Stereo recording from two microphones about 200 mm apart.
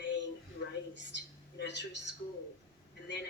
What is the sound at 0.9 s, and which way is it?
Speech, 60° left (ahead or behind).